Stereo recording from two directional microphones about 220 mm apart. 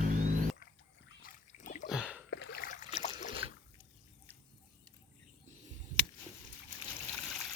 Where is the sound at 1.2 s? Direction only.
35° left (ahead or behind).